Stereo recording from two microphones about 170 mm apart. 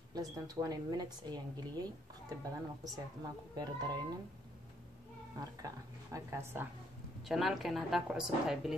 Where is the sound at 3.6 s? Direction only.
25° right (ahead or behind).